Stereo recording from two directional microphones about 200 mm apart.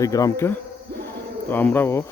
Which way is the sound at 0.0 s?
15° left (ahead or behind).